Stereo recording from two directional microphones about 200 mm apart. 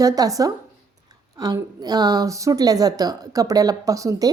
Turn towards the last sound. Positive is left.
turn(degrees=-15)  # may be behind; listen again after turning